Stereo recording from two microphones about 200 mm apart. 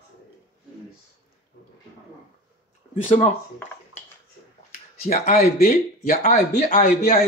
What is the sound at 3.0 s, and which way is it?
Speech, 35° left (ahead or behind).